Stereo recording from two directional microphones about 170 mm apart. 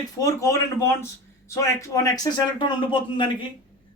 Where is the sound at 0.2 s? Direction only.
20° left (ahead or behind).